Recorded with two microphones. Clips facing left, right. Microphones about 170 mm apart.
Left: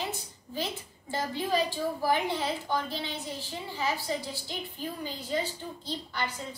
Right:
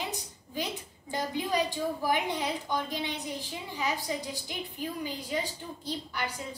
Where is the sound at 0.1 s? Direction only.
15° right (ahead or behind).